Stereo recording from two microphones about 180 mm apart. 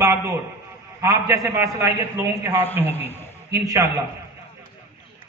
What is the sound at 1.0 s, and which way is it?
A man's voice, 15° right (ahead or behind).